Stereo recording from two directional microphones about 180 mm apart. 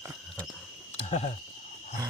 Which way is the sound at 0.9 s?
35° left (ahead or behind).